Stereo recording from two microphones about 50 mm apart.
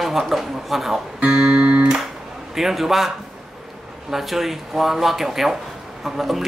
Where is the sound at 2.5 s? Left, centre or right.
Centre.